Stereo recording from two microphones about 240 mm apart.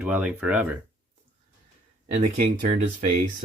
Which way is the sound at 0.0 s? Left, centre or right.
Centre.